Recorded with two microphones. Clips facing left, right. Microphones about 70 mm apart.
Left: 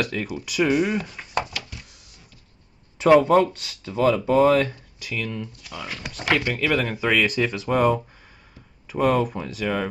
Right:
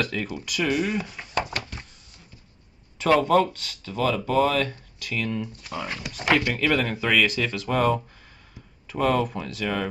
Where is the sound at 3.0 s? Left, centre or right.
Centre.